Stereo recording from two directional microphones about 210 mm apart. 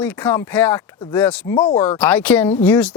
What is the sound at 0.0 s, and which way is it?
Speech, 10° left (ahead or behind).